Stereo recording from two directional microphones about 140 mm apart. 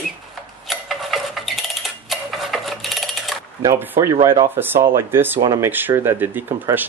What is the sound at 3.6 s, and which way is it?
Speech, 20° right (ahead or behind).